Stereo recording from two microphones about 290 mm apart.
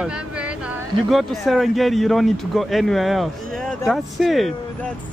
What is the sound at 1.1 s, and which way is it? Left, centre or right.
Speech, centre.